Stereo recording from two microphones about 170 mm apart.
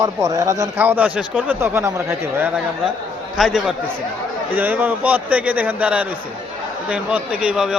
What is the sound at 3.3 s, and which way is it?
A man's voice, centre (ahead or behind).